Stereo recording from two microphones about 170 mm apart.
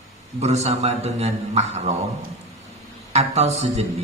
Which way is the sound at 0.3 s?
40° right (ahead or behind).